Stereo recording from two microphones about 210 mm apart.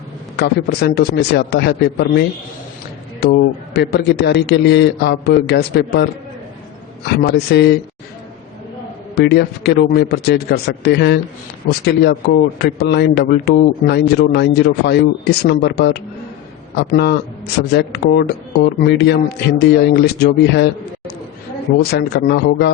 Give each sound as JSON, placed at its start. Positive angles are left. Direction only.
{"t": 0.3, "sound": "a man's voice", "side_deg": 50}
{"t": 3.8, "sound": "a man's voice", "side_deg": 50}
{"t": 7.2, "sound": "a man's voice", "side_deg": 50}
{"t": 9.1, "sound": "a man's voice", "side_deg": 50}
{"t": 21.8, "sound": "a man's voice", "side_deg": 50}